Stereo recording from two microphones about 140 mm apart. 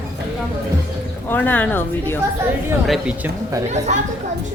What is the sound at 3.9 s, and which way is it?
Speech, 55° right (ahead or behind).